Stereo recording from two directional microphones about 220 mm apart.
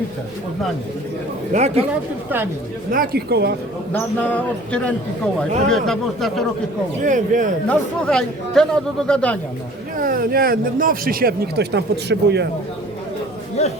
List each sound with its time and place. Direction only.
1.5 s speech: 30° right (ahead or behind)
2.9 s speech: 40° right (ahead or behind)
4.2 s speech: 5° left (ahead or behind)
7.0 s speech: 35° right (ahead or behind)
7.7 s speech: 5° left (ahead or behind)
10.0 s speech: 40° right (ahead or behind)